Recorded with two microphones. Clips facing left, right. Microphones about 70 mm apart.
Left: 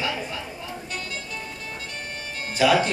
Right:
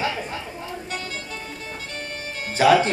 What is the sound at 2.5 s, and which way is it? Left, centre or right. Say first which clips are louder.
Speech: right 3 dB; right.